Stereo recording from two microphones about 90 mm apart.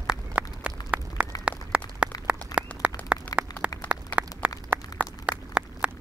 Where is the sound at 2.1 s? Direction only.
45° left (ahead or behind).